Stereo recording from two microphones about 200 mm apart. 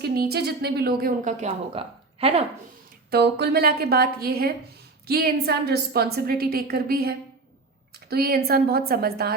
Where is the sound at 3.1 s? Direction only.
55° right (ahead or behind).